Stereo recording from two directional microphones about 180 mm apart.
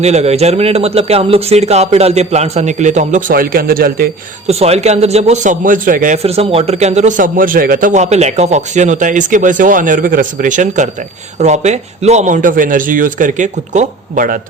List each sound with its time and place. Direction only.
0.0 s a man's voice: 35° right (ahead or behind); by 4.1 s 55° right (ahead or behind)
4.4 s a man's voice: 35° right (ahead or behind)
6.2 s speech: 35° right (ahead or behind)